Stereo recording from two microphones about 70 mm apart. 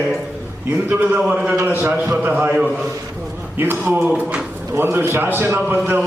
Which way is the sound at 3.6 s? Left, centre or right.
Right.